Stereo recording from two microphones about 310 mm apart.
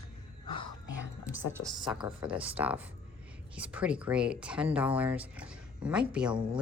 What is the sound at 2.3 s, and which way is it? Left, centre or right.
Speech, centre.